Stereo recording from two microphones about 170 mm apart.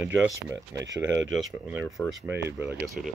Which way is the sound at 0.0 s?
10° right (ahead or behind).